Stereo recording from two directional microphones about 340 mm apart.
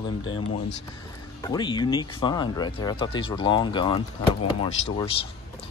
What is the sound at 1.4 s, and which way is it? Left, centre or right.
Speech, centre.